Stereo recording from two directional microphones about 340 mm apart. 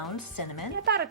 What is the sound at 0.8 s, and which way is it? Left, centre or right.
Speech, right.